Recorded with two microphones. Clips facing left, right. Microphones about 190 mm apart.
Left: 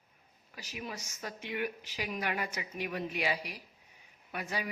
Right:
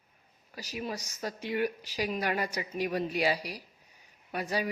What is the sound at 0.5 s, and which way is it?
Speech, 35° right (ahead or behind).